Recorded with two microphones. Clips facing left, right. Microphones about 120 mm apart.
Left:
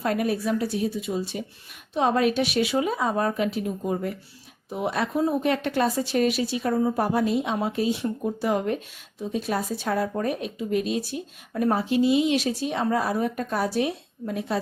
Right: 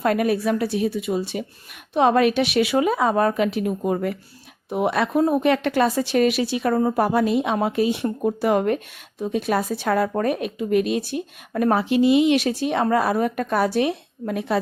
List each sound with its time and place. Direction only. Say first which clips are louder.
0.0 s speech: right 5 dB; 70° right (ahead or behind)